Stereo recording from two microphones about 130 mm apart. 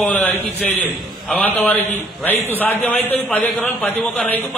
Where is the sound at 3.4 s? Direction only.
Centre (ahead or behind).